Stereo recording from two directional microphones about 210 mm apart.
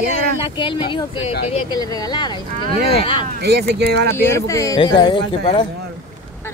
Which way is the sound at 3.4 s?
50° right (ahead or behind).